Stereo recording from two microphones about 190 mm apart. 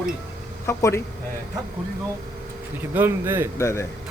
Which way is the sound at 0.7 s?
15° left (ahead or behind).